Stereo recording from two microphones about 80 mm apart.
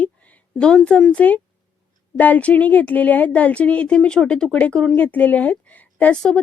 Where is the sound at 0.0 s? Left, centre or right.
Centre.